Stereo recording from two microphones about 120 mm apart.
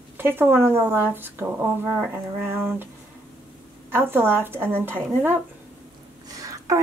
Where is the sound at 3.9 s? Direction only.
20° right (ahead or behind).